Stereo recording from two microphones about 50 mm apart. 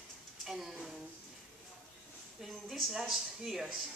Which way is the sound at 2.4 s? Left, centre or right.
Centre.